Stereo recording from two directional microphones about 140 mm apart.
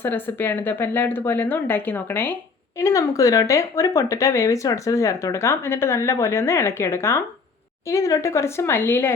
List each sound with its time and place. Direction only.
0.0 s speech: 15° left (ahead or behind)
2.8 s speech: 25° left (ahead or behind)